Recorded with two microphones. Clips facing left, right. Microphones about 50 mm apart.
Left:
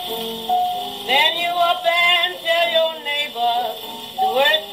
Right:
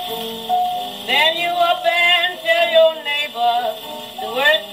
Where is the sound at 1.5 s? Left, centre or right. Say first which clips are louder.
Right 1 dB; centre.